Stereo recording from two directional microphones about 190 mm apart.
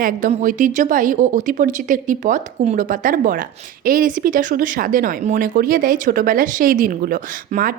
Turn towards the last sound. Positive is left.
turn(degrees=-45)  # may be behind; listen again after turning